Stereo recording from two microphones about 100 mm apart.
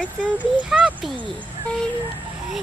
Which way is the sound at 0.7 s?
10° right (ahead or behind).